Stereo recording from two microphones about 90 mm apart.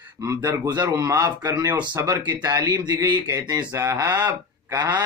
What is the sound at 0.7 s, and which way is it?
Speech, 50° right (ahead or behind).